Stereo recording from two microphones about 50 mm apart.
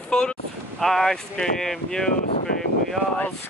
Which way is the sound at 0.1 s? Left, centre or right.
Centre.